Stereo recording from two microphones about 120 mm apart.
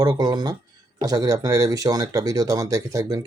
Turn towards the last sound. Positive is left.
turn(degrees=-30)  # may be behind; listen again after turning